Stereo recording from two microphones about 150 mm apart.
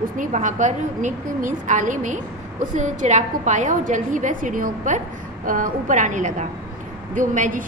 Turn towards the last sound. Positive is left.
turn(degrees=-60)  # may be behind; listen again after turning